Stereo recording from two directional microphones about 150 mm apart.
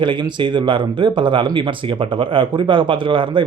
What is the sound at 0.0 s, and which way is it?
Speech, 30° right (ahead or behind).